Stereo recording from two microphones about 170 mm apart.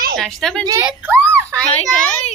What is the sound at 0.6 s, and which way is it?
Speech, 20° right (ahead or behind).